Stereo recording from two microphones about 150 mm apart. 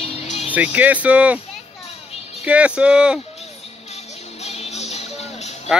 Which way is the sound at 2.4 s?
10° right (ahead or behind).